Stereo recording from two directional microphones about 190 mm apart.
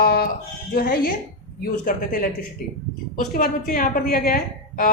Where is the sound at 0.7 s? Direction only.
50° left (ahead or behind).